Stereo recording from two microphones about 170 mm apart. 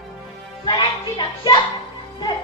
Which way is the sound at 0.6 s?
25° left (ahead or behind).